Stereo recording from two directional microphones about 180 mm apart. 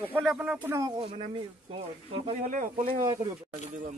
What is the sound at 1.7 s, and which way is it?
Speech, 30° right (ahead or behind).